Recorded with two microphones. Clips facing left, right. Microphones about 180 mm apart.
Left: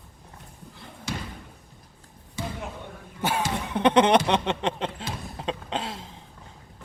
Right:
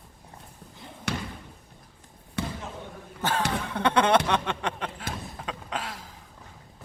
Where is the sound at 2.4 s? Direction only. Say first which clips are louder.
Right 1 dB; 65° right (ahead or behind).